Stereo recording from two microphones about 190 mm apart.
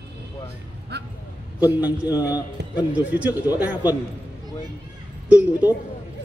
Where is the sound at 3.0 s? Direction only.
10° right (ahead or behind).